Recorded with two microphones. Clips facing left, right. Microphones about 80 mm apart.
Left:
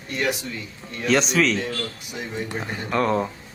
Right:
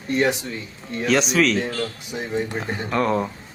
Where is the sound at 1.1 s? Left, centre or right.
Centre.